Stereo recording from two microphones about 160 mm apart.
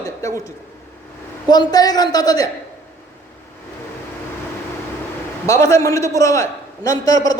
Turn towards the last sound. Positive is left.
turn(degrees=20)  # may be behind; listen again after turning